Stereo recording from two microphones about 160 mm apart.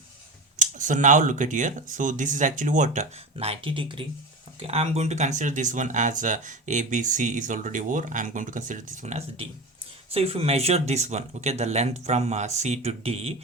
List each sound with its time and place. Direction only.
0.6 s speech: 50° right (ahead or behind)